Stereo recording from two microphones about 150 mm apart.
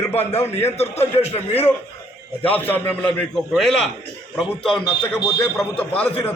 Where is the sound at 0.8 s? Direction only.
45° left (ahead or behind).